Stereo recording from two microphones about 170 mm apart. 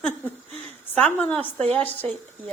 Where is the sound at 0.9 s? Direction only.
5° left (ahead or behind).